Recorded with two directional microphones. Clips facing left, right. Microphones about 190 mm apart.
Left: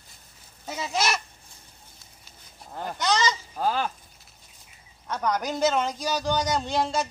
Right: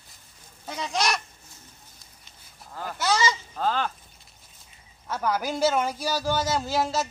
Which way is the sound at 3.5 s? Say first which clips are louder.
Even; 10° left (ahead or behind).